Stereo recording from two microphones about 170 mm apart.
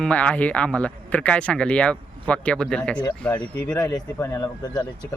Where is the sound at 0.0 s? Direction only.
5° left (ahead or behind).